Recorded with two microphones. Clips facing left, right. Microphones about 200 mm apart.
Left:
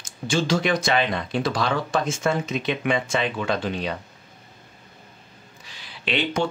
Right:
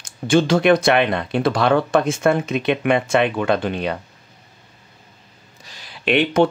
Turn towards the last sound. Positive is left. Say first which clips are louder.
# right 8 dB
turn(degrees=-55)  # may be behind; listen again after turning